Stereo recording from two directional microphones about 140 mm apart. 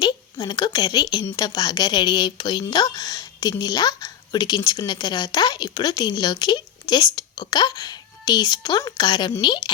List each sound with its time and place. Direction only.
0.0 s speech: 30° left (ahead or behind)